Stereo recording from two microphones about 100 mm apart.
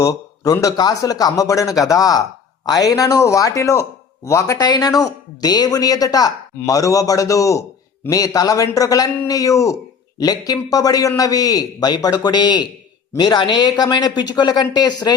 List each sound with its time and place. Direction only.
0.0 s a man's voice: 35° left (ahead or behind)